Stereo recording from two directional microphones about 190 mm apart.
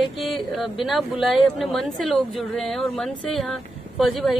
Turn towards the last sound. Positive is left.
turn(degrees=0)  # may be behind; listen again after turning